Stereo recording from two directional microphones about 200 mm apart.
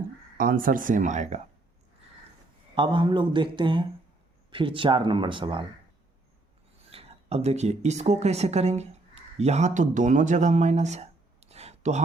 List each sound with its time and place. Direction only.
0.3 s speech: 45° right (ahead or behind)
2.7 s a man's voice: 25° right (ahead or behind)
6.9 s speech: 30° right (ahead or behind)